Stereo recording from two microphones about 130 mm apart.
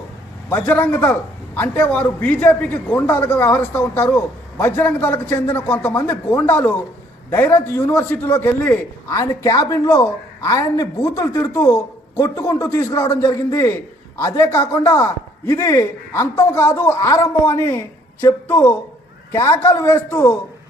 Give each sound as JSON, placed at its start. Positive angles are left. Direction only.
{"t": 0.5, "sound": "a man's voice", "side_deg": 15}
{"t": 9.0, "sound": "a woman's voice", "side_deg": 25}